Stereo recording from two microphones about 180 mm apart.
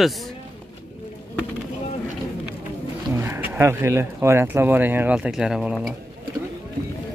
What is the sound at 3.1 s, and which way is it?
Speech, 15° right (ahead or behind).